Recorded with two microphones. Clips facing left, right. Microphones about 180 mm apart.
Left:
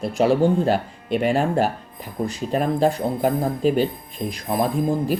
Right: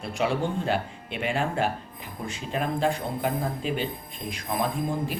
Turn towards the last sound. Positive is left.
turn(degrees=40)  # may be behind; listen again after turning